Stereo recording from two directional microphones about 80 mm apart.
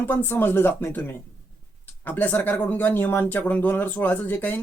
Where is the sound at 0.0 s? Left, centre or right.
Left.